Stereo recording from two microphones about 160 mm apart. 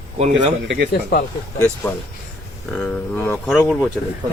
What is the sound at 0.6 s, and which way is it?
Speech, 80° right.